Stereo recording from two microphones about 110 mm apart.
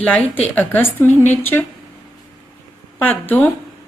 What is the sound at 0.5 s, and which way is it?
A woman's voice, 15° left (ahead or behind).